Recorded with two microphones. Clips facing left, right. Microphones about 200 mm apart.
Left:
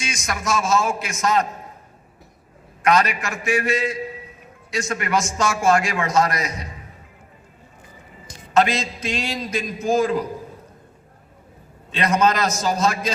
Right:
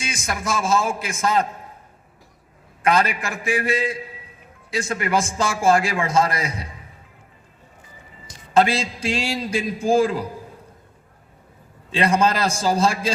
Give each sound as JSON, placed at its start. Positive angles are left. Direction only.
{"t": 0.3, "sound": "a man's voice", "side_deg": -30}
{"t": 2.8, "sound": "a man's voice", "side_deg": -30}
{"t": 8.5, "sound": "a man's voice", "side_deg": -30}
{"t": 11.9, "sound": "a man's voice", "side_deg": -30}